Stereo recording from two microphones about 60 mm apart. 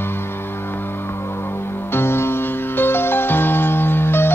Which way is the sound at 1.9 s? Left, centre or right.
Left.